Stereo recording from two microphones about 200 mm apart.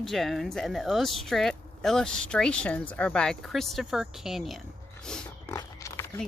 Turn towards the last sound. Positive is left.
turn(degrees=15)  # may be behind; listen again after turning